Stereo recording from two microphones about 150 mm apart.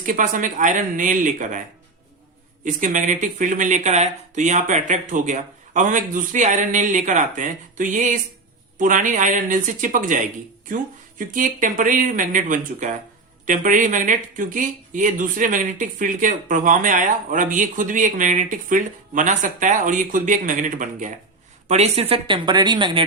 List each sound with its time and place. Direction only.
0.0 s speech: 60° right (ahead or behind)
2.6 s speech: 60° right (ahead or behind)
21.7 s speech: 45° right (ahead or behind)